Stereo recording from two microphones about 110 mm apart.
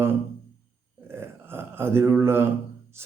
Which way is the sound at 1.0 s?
20° right (ahead or behind).